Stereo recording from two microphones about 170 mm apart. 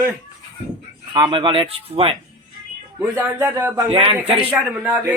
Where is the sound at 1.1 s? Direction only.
25° right (ahead or behind).